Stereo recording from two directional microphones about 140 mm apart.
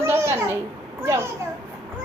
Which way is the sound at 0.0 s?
20° right (ahead or behind).